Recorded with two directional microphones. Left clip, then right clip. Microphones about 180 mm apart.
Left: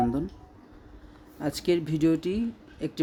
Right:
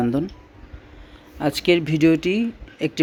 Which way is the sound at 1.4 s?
10° right (ahead or behind).